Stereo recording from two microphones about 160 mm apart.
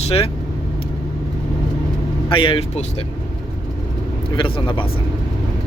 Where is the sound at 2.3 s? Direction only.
35° left (ahead or behind).